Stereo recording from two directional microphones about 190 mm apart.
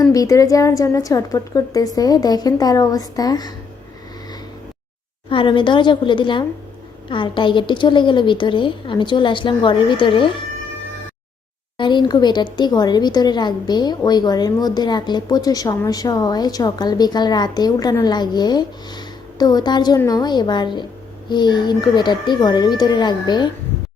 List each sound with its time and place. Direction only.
0.0 s a woman's voice: 20° left (ahead or behind)
5.3 s a woman's voice: 25° left (ahead or behind)
11.8 s a woman's voice: 25° left (ahead or behind)